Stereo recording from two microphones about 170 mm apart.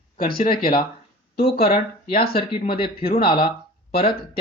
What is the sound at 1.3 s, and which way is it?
Speech, 70° left (ahead or behind).